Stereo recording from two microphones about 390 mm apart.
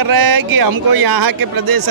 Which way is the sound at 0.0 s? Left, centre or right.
Right.